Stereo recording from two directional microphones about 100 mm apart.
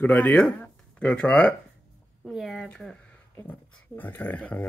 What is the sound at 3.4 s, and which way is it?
Speech, 20° left (ahead or behind).